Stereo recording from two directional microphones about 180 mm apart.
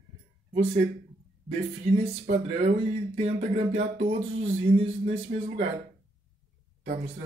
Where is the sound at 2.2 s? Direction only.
45° right (ahead or behind).